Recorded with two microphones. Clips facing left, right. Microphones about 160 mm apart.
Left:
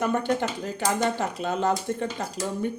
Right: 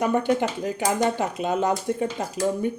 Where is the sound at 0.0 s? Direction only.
15° right (ahead or behind).